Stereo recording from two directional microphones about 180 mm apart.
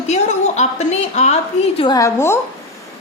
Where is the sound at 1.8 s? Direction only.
20° left (ahead or behind).